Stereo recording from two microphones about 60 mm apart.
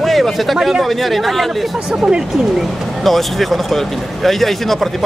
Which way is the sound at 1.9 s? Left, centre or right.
Centre.